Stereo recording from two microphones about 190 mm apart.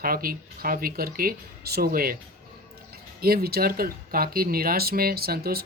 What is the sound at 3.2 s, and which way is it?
Speech, 50° right (ahead or behind).